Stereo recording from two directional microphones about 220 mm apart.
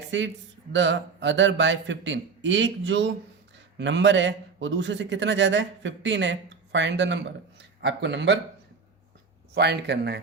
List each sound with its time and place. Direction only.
0.1 s a man's voice: 55° right (ahead or behind)
9.6 s speech: 50° right (ahead or behind)